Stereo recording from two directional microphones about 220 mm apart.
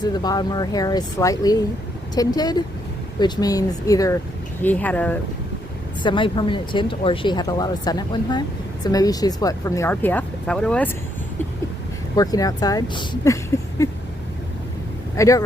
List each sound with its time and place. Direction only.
0.0 s speech: 20° left (ahead or behind)
6.0 s speech: 20° left (ahead or behind); by 10.9 s 5° left (ahead or behind)
12.1 s speech: 15° left (ahead or behind)
15.1 s speech: 15° left (ahead or behind)